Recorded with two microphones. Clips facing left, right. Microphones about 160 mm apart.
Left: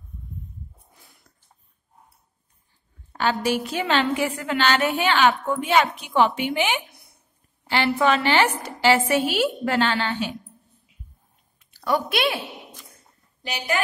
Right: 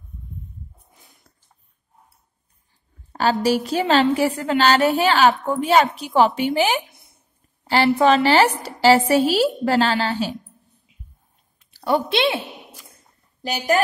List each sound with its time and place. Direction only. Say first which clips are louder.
3.1 s a woman's voice: right 4 dB; 35° right (ahead or behind)
6.9 s a sound: even; 20° right (ahead or behind)
7.6 s a woman's voice: right 5 dB; 40° right (ahead or behind)
11.7 s a woman's voice: right 3 dB; 30° right (ahead or behind)
13.4 s speech: right 6 dB; 40° right (ahead or behind)